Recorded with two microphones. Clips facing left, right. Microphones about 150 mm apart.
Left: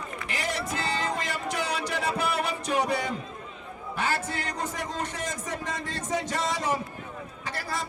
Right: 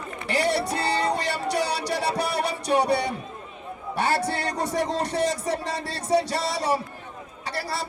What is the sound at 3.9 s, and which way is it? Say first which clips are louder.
A man's voice: right 5 dB; 35° right (ahead or behind).